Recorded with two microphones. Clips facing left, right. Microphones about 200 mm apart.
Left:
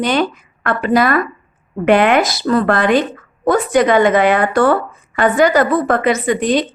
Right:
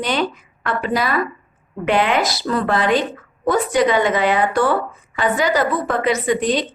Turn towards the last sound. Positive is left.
turn(degrees=55)  # may be behind; listen again after turning